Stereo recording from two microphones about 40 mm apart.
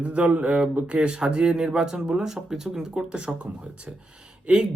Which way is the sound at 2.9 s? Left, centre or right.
Right.